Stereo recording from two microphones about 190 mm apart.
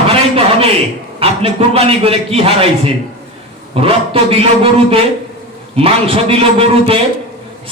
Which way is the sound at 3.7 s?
30° right (ahead or behind).